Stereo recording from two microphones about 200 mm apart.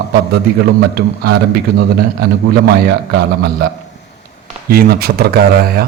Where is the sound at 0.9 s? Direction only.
55° right (ahead or behind).